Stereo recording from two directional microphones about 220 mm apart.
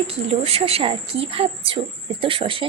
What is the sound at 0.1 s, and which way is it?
Speech, 25° right (ahead or behind).